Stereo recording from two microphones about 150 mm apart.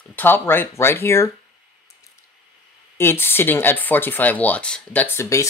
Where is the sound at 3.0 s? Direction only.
15° left (ahead or behind).